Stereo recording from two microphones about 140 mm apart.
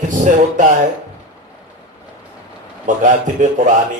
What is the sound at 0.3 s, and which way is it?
Speech, 65° right (ahead or behind).